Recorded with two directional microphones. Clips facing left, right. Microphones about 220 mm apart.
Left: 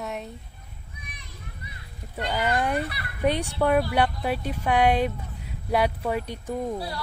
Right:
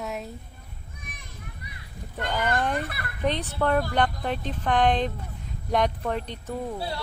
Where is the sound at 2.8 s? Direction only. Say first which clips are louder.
Left 1 dB; 50° right (ahead or behind).